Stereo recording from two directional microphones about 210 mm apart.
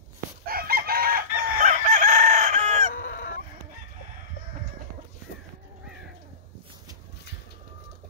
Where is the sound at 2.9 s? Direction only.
50° left (ahead or behind).